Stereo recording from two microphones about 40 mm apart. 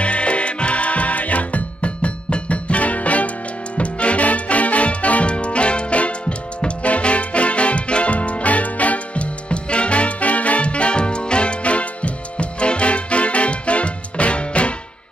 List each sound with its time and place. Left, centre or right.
0.0 s music: left